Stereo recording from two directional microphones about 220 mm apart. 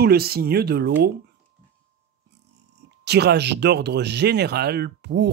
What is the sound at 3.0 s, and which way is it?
Speech, 50° right (ahead or behind).